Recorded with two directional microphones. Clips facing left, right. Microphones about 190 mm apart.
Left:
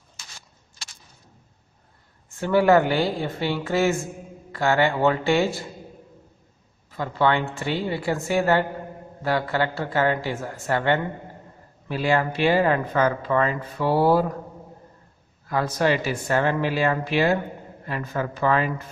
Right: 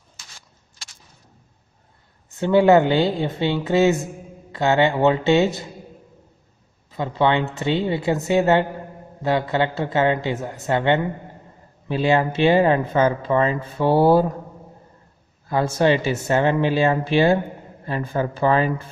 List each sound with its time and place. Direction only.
2.2 s a woman's voice: 20° right (ahead or behind)
6.9 s a woman's voice: 20° right (ahead or behind)
15.4 s a woman's voice: 25° right (ahead or behind)